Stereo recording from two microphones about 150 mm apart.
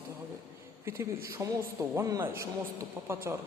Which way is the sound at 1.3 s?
20° right (ahead or behind).